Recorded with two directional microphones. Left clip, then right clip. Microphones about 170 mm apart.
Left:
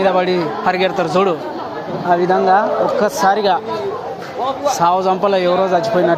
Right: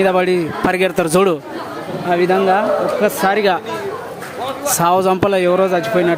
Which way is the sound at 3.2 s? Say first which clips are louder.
Left 2 dB; 65° right (ahead or behind).